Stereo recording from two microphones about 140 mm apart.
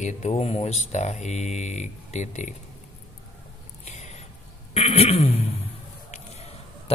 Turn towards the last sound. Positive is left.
turn(degrees=45)  # may be behind; listen again after turning